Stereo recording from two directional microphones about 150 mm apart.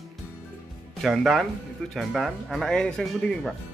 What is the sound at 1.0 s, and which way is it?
Speech, centre (ahead or behind).